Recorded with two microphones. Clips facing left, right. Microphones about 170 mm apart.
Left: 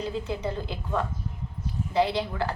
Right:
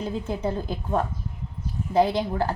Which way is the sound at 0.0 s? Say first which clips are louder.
Right 2 dB; 45° right (ahead or behind).